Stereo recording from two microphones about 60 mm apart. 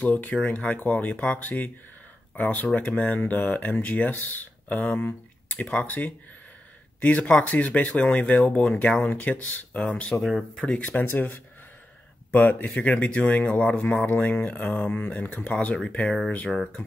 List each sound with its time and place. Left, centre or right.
0.0 s speech: left